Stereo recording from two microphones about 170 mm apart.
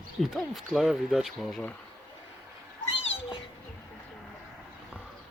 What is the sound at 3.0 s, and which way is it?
Cat, 35° left (ahead or behind).